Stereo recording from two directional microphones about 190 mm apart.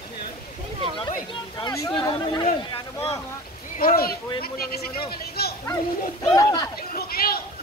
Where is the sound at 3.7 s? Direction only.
50° left (ahead or behind).